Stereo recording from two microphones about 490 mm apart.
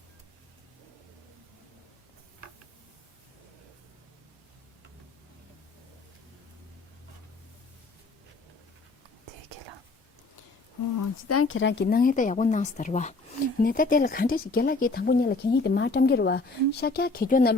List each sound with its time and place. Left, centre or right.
10.9 s speech: left